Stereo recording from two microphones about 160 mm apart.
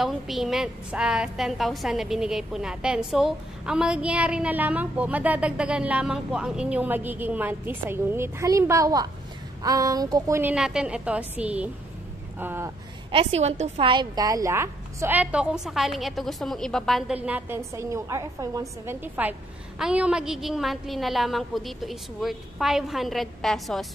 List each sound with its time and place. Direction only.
0.0 s a woman's voice: centre (ahead or behind); by 10.5 s 20° right (ahead or behind)
10.5 s a woman's voice: 5° right (ahead or behind)
13.1 s a woman's voice: 40° right (ahead or behind); by 17.2 s centre (ahead or behind)
17.3 s a woman's voice: 15° right (ahead or behind); by 23.9 s centre (ahead or behind)